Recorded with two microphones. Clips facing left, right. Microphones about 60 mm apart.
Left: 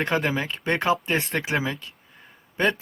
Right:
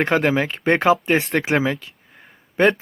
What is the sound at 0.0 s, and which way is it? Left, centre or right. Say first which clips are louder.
Speech: right 6 dB; right.